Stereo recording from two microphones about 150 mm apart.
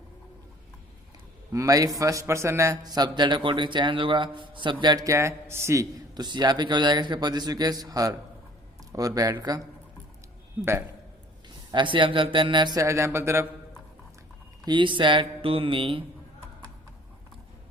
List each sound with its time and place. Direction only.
1.5 s a man's voice: 25° right (ahead or behind)
11.4 s a man's voice: 30° right (ahead or behind)
14.6 s speech: 30° right (ahead or behind)